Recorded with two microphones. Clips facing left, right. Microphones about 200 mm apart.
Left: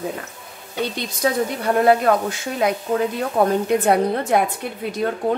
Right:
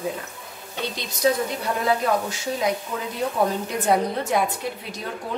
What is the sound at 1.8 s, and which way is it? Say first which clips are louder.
A woman's voice: left 6 dB; 60° left (ahead or behind).